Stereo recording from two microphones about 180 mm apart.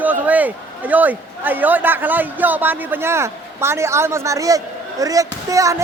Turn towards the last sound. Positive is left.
turn(degrees=-20)  # may be behind; listen again after turning